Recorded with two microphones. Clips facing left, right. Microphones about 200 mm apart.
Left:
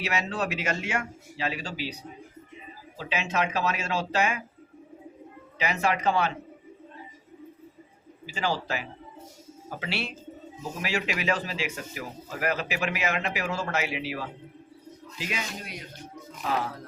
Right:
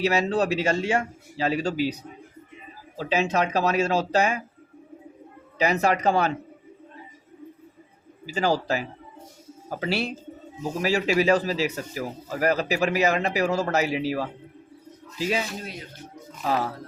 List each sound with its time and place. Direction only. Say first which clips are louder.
0.0 s speech: right 7 dB; 35° right (ahead or behind)
3.0 s speech: right 5 dB; 35° right (ahead or behind)
5.5 s speech: right 5 dB; 40° right (ahead or behind)
8.3 s speech: right 6 dB; 40° right (ahead or behind)